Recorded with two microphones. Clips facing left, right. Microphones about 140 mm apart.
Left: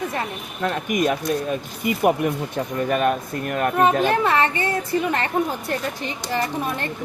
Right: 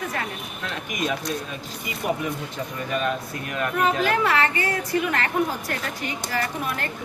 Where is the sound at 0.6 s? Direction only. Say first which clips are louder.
Left 8 dB; 50° left (ahead or behind).